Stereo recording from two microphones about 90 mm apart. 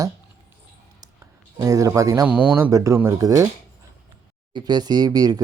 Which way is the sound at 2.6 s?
35° right (ahead or behind).